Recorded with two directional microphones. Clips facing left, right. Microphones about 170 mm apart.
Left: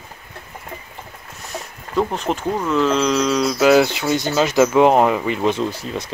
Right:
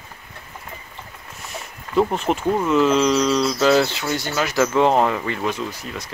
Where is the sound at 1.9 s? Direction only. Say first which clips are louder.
Right 1 dB; centre (ahead or behind).